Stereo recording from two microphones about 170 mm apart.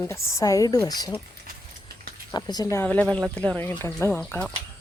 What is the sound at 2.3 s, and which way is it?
Speech, 25° left (ahead or behind).